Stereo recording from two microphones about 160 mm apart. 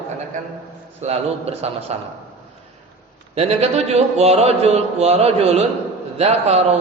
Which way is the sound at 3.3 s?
40° right (ahead or behind).